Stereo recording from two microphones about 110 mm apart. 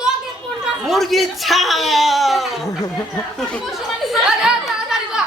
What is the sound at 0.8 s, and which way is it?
Speech, centre (ahead or behind).